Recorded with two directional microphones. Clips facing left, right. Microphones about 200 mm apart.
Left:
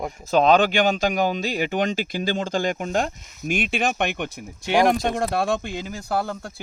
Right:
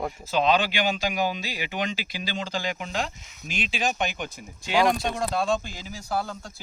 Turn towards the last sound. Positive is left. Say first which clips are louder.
# left 4 dB
turn(degrees=60)  # may be behind; listen again after turning